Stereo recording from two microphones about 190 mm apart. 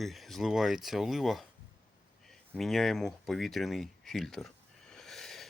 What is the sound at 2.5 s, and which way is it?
Speech, centre (ahead or behind).